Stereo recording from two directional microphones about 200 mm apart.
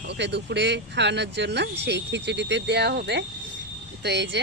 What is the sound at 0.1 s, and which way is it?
Speech, 60° right (ahead or behind).